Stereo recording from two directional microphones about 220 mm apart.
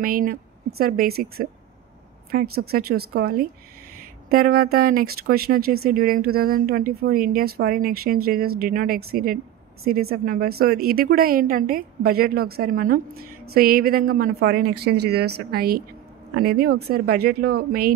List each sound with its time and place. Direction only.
0.0 s speech: 40° right (ahead or behind)